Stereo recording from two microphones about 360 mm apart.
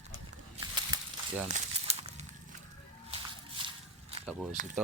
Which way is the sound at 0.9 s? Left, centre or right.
Centre.